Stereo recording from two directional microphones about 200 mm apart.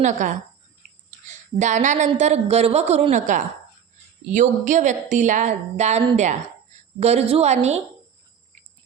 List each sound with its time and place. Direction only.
0.0 s speech: 40° right (ahead or behind)